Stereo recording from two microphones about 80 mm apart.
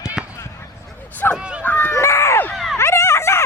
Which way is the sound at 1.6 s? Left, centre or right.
Left.